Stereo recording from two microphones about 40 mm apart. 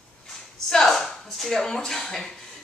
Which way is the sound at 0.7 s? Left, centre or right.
Centre.